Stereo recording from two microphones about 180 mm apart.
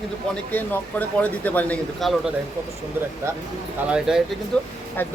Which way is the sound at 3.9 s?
5° right (ahead or behind).